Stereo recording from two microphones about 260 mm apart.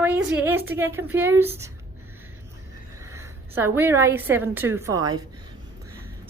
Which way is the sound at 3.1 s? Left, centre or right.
Centre.